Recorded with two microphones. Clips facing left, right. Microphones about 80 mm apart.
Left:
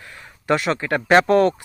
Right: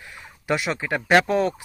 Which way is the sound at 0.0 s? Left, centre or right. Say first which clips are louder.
Left 3 dB; centre.